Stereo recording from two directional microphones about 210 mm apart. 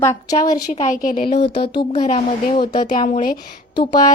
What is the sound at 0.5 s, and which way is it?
Speech, 40° left (ahead or behind).